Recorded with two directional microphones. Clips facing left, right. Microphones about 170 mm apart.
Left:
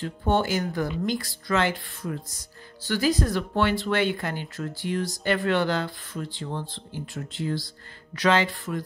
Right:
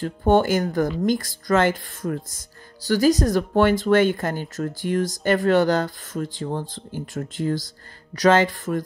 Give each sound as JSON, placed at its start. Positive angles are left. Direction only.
{"t": 0.0, "sound": "speech", "side_deg": -45}